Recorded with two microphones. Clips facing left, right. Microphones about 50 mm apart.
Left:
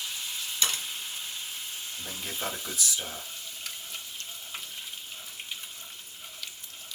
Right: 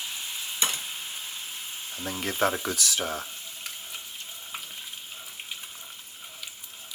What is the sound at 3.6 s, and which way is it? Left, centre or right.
Frying, centre.